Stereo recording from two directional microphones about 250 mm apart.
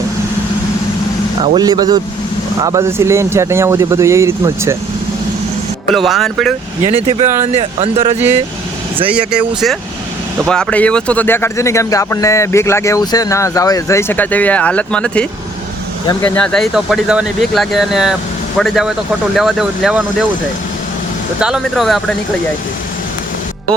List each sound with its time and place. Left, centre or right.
1.5 s speech: centre
5.9 s speech: centre
6.8 s speech: right
9.0 s speech: centre
21.4 s speech: centre